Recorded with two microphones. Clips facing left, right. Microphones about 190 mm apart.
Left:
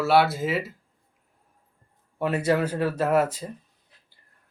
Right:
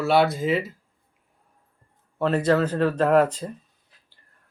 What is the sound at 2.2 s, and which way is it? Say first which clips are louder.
Speech: right 3 dB; 10° left (ahead or behind).